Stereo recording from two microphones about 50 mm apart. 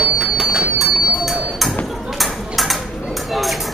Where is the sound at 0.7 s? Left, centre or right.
Centre.